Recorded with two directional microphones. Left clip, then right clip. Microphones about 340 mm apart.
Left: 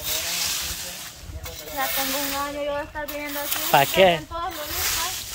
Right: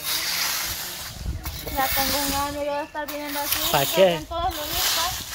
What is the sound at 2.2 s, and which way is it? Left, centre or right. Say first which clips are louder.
Speech: right 1 dB; right.